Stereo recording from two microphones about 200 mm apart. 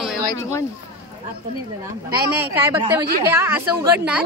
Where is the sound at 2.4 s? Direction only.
10° right (ahead or behind).